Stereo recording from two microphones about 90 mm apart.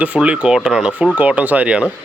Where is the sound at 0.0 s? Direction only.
15° right (ahead or behind).